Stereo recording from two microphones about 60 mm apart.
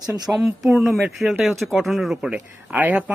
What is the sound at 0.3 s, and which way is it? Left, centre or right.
Speech, centre.